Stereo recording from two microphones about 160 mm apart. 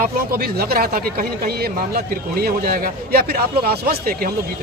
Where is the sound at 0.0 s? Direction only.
70° right (ahead or behind).